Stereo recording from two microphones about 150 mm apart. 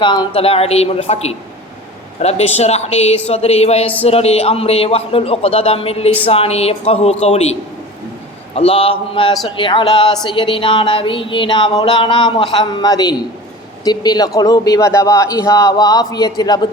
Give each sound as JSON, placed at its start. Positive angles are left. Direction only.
{"t": 0.0, "sound": "a man's voice", "side_deg": 30}
{"t": 8.5, "sound": "speech", "side_deg": 40}